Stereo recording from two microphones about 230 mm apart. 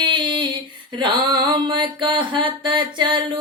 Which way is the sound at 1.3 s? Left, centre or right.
Centre.